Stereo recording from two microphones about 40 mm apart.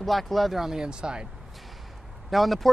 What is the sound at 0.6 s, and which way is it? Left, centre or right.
Speech, centre.